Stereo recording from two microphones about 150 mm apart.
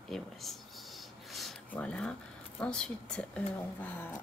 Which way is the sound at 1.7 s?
10° left (ahead or behind).